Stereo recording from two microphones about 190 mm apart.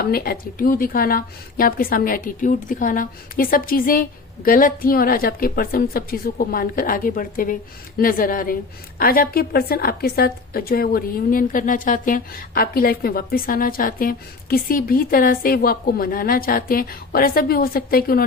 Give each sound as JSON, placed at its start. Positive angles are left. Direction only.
{"t": 0.0, "sound": "a woman's voice", "side_deg": 50}